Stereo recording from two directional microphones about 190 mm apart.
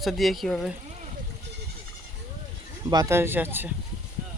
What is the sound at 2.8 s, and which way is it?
Speech, 20° right (ahead or behind).